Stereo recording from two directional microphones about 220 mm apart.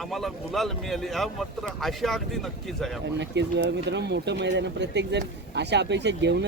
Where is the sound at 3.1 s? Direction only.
50° right (ahead or behind).